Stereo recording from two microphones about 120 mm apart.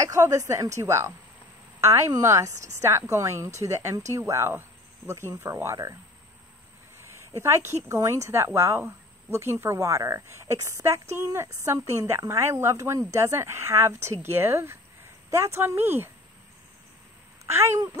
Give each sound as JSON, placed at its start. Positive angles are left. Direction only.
{"t": 0.0, "sound": "speech", "side_deg": -25}
{"t": 7.1, "sound": "speech", "side_deg": -20}
{"t": 17.5, "sound": "speech", "side_deg": -20}